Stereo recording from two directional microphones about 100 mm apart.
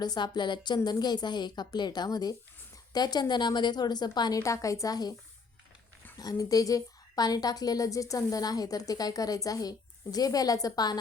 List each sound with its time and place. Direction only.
0.0 s a woman's voice: 45° left (ahead or behind)
6.1 s a woman's voice: 35° left (ahead or behind)